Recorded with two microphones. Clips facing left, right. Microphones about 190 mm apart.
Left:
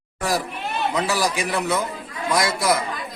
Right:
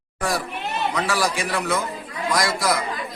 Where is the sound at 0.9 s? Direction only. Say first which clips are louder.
Left 1 dB; 20° left (ahead or behind).